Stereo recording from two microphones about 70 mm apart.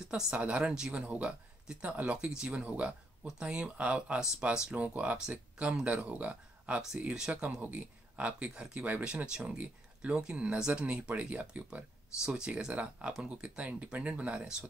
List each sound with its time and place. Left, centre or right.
0.0 s speech: centre